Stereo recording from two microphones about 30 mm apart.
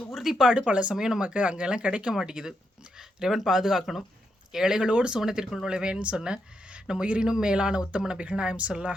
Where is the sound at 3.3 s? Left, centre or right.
Centre.